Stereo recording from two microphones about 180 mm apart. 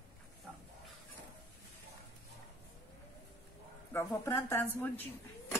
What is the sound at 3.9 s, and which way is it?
A woman's voice, 15° left (ahead or behind).